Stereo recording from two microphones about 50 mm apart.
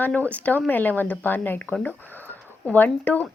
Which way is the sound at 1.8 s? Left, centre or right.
Left.